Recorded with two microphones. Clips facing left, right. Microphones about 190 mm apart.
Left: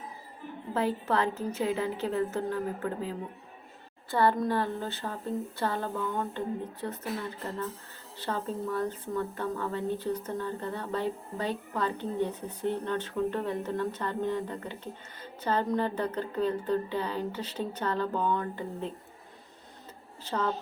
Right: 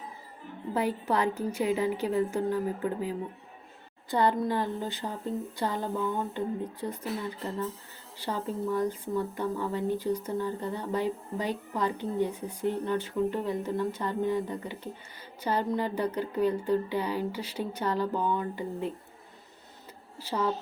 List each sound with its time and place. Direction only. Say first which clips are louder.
0.7 s speech: even; 15° right (ahead or behind)
8.2 s speech: right 1 dB; 15° right (ahead or behind)
20.2 s speech: right 1 dB; 10° right (ahead or behind)